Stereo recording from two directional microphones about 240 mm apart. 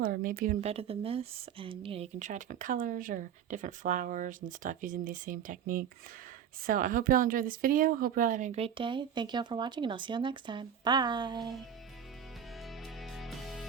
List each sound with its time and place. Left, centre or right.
0.0 s a woman's voice: right; by 11.5 s centre
13.0 s music: centre